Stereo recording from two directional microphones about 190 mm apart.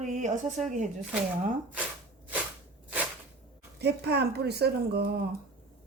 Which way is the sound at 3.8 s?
60° right (ahead or behind).